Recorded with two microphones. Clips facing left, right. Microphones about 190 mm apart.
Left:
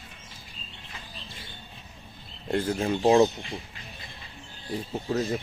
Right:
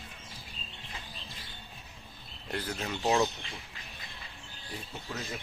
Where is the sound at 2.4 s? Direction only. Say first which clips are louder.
Left 10 dB; 25° left (ahead or behind).